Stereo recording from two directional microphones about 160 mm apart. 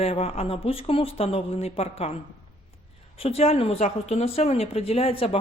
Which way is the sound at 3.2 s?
40° left (ahead or behind).